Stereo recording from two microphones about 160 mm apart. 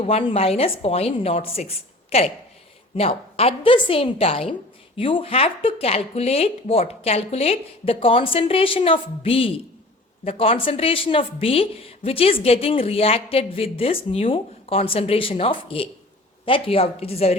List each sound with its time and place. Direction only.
0.0 s a woman's voice: 35° left (ahead or behind)